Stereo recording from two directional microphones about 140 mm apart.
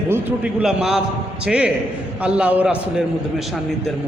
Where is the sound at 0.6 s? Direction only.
5° right (ahead or behind).